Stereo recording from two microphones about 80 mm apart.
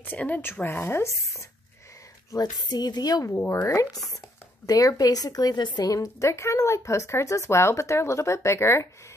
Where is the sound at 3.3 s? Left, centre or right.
Left.